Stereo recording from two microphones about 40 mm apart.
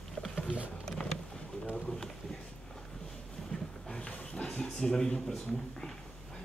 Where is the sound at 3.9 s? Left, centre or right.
Left.